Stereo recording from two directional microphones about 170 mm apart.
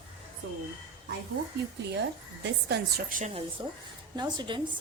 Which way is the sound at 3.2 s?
45° right (ahead or behind).